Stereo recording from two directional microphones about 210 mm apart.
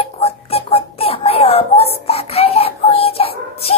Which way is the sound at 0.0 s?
30° left (ahead or behind).